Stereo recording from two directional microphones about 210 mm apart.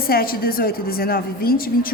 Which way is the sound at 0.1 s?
45° left (ahead or behind).